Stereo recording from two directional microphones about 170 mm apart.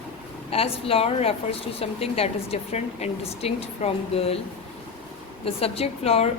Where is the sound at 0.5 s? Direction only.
35° left (ahead or behind).